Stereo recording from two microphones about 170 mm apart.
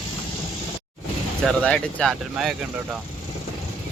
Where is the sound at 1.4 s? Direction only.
5° left (ahead or behind).